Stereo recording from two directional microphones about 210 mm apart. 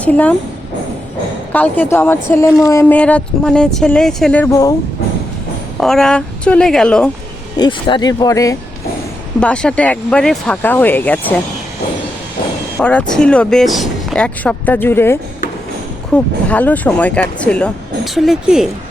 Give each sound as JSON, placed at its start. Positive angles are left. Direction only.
{"t": 0.0, "sound": "a woman's voice", "side_deg": 5}
{"t": 1.5, "sound": "a woman's voice", "side_deg": 10}
{"t": 5.8, "sound": "speech", "side_deg": 0}
{"t": 7.5, "sound": "speech", "side_deg": 20}
{"t": 9.4, "sound": "speech", "side_deg": 5}
{"t": 12.8, "sound": "speech", "side_deg": 5}